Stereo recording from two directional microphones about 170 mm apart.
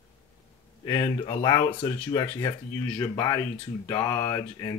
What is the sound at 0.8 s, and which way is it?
Speech, 25° left (ahead or behind).